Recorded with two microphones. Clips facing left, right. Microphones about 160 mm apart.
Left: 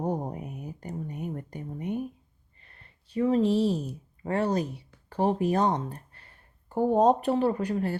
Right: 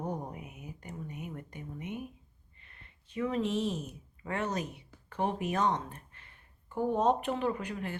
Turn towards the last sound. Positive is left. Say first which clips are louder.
# left 7 dB
turn(degrees=35)  # may be behind; listen again after turning